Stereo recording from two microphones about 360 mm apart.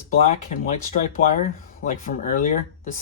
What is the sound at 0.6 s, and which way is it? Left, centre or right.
Speech, left.